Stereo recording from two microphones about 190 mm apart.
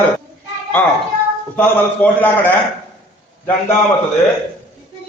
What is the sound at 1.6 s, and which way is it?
Speech, 10° left (ahead or behind).